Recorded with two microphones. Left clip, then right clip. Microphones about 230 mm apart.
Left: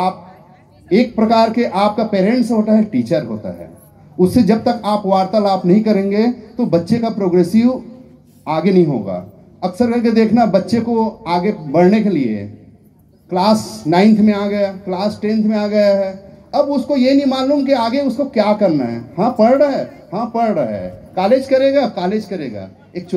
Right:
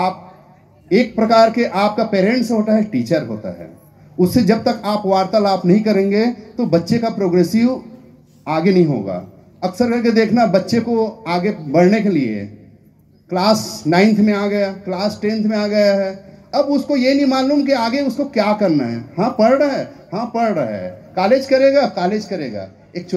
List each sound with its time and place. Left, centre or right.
0.8 s a man's voice: right